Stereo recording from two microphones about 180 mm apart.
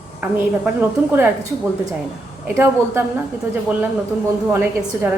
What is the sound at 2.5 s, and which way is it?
Speech, 10° right (ahead or behind).